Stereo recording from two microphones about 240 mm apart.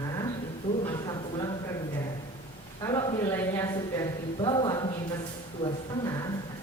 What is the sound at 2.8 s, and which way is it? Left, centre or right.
A woman's voice, centre.